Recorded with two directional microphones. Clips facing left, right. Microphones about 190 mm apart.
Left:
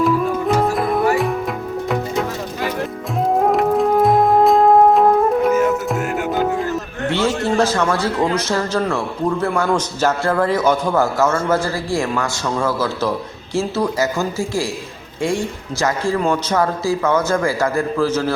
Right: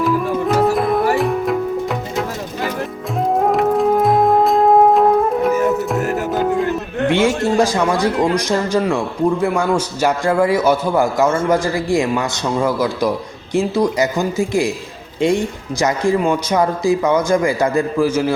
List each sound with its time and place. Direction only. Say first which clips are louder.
0.0 s music: even; centre (ahead or behind)
3.2 s music: even; centre (ahead or behind)
7.1 s speech: right 2 dB; 15° right (ahead or behind)